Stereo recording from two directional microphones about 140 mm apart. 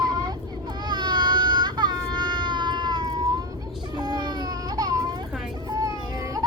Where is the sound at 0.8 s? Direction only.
30° right (ahead or behind).